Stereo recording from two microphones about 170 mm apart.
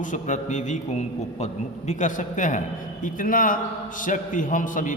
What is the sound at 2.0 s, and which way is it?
A man's voice, 50° left (ahead or behind).